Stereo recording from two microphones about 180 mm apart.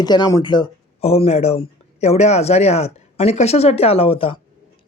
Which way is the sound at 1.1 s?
35° left (ahead or behind).